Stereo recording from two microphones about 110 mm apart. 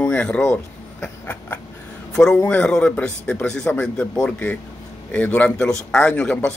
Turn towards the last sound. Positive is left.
turn(degrees=10)  # may be behind; listen again after turning